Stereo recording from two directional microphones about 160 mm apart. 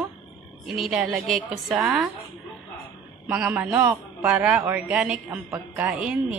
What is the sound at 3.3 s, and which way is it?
A man's voice, 10° right (ahead or behind).